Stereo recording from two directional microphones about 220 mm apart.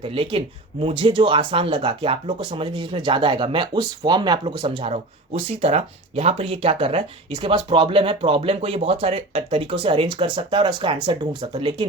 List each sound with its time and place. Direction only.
0.0 s speech: 25° right (ahead or behind)